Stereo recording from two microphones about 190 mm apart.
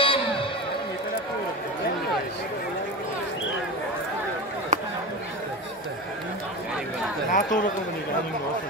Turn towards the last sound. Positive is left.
turn(degrees=45)  # may be behind; listen again after turning